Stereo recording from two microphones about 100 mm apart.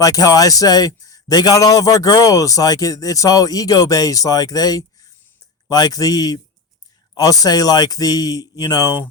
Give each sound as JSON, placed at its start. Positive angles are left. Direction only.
{"t": 0.0, "sound": "a man's voice", "side_deg": 35}